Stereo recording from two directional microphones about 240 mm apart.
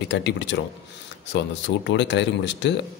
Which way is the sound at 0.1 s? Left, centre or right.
Left.